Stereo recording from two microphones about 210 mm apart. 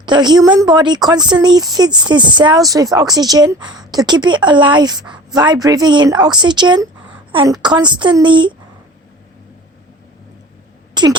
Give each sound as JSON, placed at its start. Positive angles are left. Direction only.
{"t": 0.0, "sound": "a woman's voice", "side_deg": -20}
{"t": 10.9, "sound": "speech", "side_deg": -20}